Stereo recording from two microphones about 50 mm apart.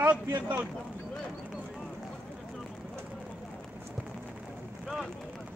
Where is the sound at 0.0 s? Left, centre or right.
Right.